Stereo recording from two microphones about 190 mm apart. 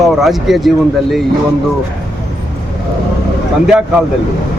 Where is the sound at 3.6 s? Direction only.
5° right (ahead or behind).